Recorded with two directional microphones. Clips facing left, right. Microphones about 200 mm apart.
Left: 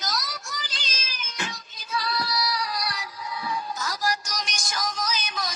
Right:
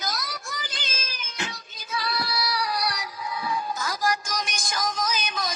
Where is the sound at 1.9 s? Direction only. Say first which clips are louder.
Left 1 dB; 60° right (ahead or behind).